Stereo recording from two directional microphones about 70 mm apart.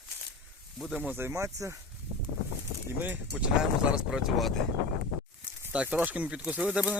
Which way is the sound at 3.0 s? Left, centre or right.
Right.